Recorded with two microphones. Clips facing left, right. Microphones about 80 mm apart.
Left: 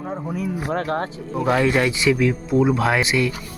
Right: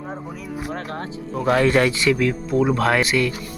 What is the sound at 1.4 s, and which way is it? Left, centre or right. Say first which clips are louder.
Speech: right 1 dB; centre.